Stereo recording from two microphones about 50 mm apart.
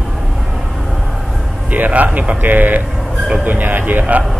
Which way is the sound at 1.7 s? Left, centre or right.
Right.